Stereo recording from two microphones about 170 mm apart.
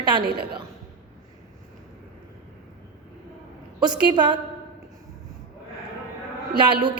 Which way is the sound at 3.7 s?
25° right (ahead or behind).